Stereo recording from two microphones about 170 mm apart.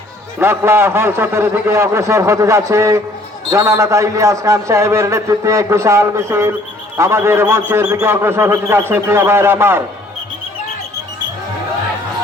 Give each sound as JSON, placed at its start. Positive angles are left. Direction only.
{"t": 0.3, "sound": "a man's voice", "side_deg": -15}